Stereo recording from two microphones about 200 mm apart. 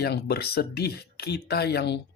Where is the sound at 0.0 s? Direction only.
55° left (ahead or behind).